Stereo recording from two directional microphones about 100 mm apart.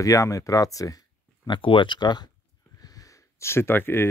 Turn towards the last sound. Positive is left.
turn(degrees=20)  # may be behind; listen again after turning